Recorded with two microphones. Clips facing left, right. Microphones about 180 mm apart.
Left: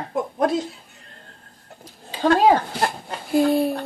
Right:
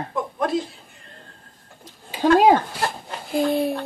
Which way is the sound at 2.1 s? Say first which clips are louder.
Right 1 dB; 15° right (ahead or behind).